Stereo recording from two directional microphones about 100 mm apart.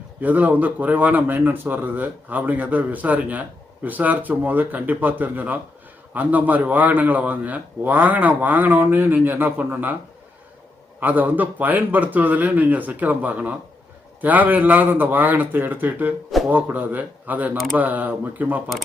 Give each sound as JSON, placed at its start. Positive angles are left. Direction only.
{"t": 0.2, "sound": "a man's voice", "side_deg": -15}
{"t": 11.0, "sound": "a man's voice", "side_deg": -15}